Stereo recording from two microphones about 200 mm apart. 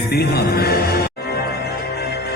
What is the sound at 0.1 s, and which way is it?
Music, 50° left (ahead or behind).